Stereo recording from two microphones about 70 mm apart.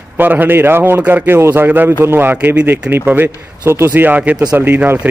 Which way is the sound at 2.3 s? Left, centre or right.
Right.